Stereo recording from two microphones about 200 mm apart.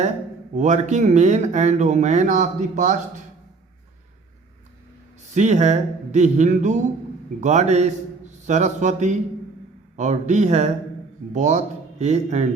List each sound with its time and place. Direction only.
0.5 s speech: 35° right (ahead or behind)
5.3 s a man's voice: 35° right (ahead or behind)